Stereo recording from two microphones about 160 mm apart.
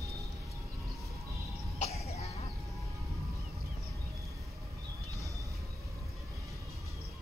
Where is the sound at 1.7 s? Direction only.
40° left (ahead or behind).